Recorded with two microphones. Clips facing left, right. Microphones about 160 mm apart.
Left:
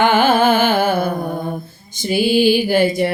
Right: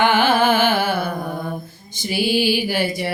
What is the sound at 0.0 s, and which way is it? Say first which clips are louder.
Music: left 3 dB; 50° left (ahead or behind).